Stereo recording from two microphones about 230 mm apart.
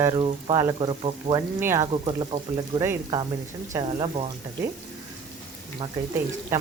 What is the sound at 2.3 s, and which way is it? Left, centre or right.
Speech, right.